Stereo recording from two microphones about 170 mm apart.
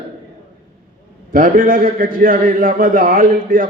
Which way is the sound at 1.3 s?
55° right (ahead or behind).